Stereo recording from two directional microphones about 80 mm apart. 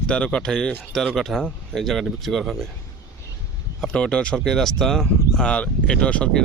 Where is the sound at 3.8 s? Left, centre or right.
Centre.